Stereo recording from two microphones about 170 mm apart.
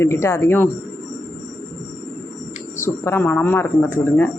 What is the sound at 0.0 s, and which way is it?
Speech, 15° left (ahead or behind).